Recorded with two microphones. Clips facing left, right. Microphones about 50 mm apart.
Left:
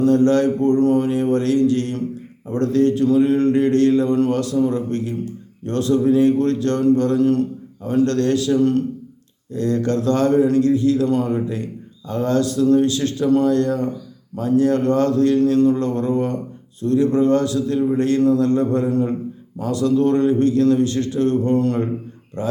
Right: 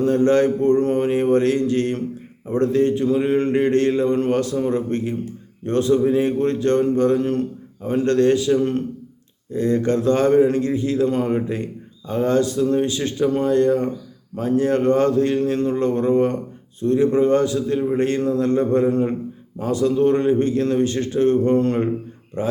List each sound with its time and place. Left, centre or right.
0.0 s speech: right